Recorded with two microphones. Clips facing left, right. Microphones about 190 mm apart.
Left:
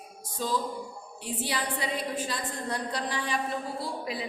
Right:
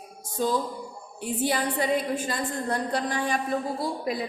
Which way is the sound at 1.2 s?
50° right (ahead or behind).